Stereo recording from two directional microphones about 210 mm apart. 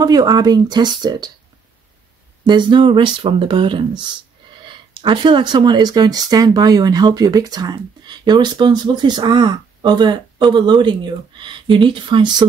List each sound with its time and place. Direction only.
0.0 s speech: 20° right (ahead or behind)
2.4 s speech: 20° right (ahead or behind)